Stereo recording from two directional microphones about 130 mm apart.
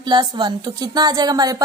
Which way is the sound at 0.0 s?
35° right (ahead or behind).